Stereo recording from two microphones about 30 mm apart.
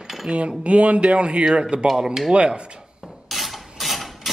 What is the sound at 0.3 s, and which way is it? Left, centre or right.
A man's voice, right.